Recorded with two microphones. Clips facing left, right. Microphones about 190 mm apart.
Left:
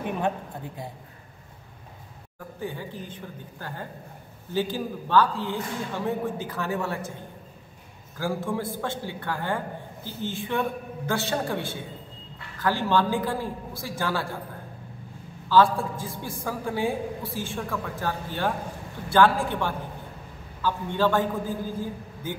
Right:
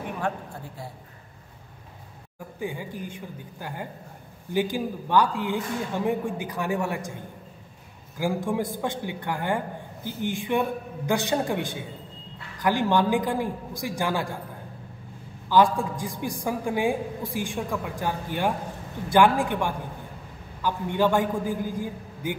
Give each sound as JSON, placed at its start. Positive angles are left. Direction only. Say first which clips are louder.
{"t": 2.6, "sound": "a woman's voice", "louder": "right 2 dB", "side_deg": -10}
{"t": 8.2, "sound": "a woman's voice", "louder": "right 2 dB", "side_deg": -15}
{"t": 15.4, "sound": "a woman's voice", "louder": "even", "side_deg": -15}